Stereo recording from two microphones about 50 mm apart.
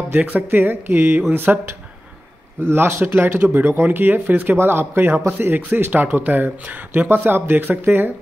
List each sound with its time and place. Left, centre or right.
0.2 s speech: right
0.5 s speech: right
2.6 s speech: right